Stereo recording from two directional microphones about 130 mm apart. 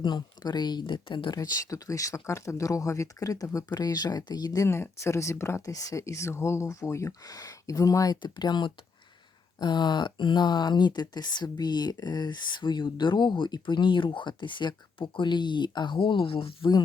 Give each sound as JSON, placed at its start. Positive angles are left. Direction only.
{"t": 0.0, "sound": "speech", "side_deg": 35}